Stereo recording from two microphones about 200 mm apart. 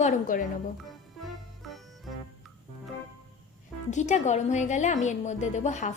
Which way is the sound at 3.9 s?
35° left (ahead or behind).